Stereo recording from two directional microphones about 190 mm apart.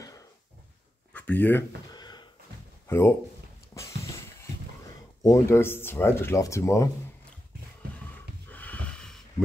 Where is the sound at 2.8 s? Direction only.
15° left (ahead or behind).